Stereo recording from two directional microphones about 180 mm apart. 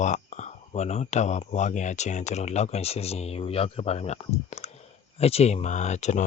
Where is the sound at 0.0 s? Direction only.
40° left (ahead or behind).